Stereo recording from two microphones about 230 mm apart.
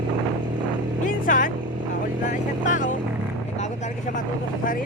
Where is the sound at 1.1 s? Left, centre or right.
Left.